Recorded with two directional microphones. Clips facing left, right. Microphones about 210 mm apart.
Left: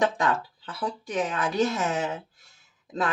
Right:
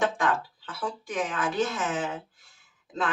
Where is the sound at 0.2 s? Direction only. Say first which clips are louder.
Left 1 dB; 35° left (ahead or behind).